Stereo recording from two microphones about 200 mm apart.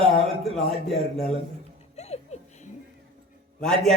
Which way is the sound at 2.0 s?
35° left (ahead or behind).